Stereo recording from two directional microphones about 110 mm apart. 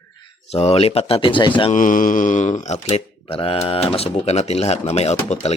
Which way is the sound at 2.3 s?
90° left.